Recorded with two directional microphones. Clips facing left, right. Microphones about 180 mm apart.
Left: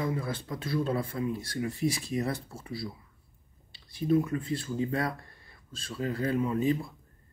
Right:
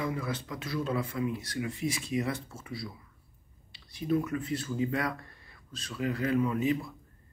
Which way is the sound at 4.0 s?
30° left (ahead or behind).